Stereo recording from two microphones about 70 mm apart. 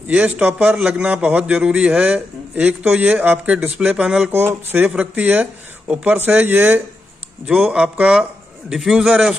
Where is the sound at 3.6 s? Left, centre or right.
Centre.